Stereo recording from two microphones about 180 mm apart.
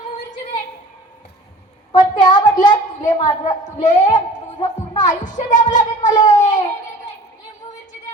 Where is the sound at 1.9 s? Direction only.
45° left (ahead or behind).